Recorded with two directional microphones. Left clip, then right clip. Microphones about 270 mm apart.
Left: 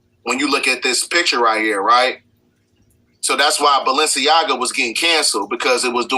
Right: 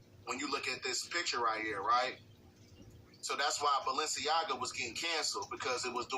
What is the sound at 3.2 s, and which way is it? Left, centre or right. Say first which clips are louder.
Speech: left 19 dB; left.